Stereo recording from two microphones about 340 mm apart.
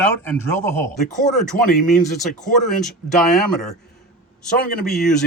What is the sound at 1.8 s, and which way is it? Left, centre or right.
Speech, centre.